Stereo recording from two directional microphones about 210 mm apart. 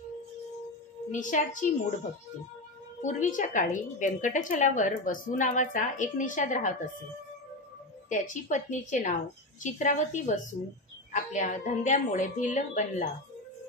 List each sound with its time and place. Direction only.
1.1 s a woman's voice: 35° left (ahead or behind)
3.0 s a woman's voice: 35° left (ahead or behind)
8.1 s a woman's voice: 35° left (ahead or behind)